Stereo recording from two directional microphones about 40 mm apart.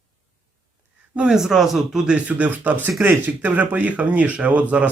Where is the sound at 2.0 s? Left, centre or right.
Right.